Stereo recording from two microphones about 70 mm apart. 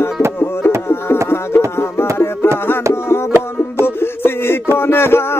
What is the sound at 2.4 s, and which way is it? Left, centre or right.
Music, left.